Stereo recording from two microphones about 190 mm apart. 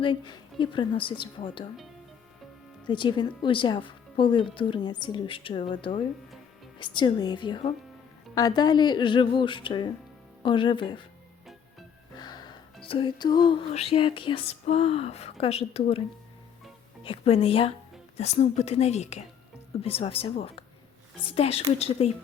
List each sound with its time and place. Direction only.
0.0 s speech: 25° left (ahead or behind)
2.8 s speech: 25° left (ahead or behind)
12.1 s music: 20° left (ahead or behind)
12.8 s a woman's voice: 30° left (ahead or behind)
17.0 s a woman's voice: 30° left (ahead or behind)